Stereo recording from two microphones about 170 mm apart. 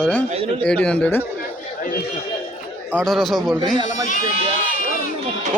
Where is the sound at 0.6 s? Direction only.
5° left (ahead or behind).